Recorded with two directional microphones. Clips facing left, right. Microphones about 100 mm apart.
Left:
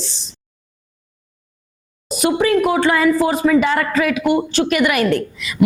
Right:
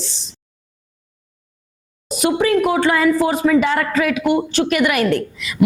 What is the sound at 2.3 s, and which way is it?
A woman's voice, 25° left (ahead or behind).